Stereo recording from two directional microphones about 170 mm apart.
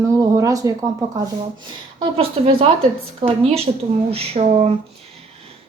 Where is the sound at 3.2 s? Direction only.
30° right (ahead or behind).